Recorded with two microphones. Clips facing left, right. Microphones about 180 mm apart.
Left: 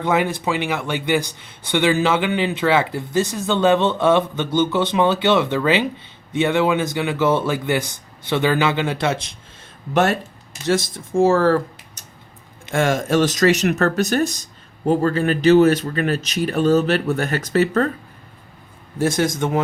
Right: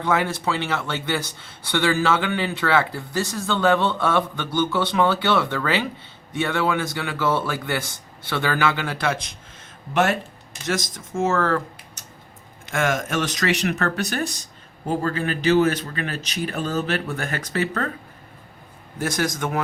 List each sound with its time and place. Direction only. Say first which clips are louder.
0.0 s a man's voice: left 3 dB; 20° left (ahead or behind)
9.9 s speech: left 3 dB; 35° left (ahead or behind)
12.6 s speech: left 4 dB; 30° left (ahead or behind)
17.1 s speech: left 7 dB; 40° left (ahead or behind)
18.9 s a man's voice: left 5 dB; 25° left (ahead or behind)